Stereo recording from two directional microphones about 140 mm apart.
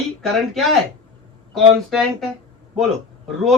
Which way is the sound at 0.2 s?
Centre (ahead or behind).